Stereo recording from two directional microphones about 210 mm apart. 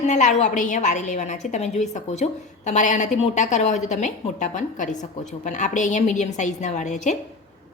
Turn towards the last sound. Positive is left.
turn(degrees=35)  # may be behind; listen again after turning